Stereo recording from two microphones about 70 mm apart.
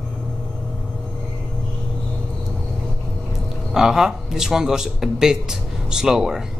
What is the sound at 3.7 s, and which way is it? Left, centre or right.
Speech, centre.